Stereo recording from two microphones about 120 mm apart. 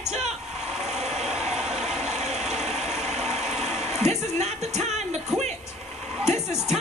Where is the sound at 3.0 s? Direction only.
65° right (ahead or behind).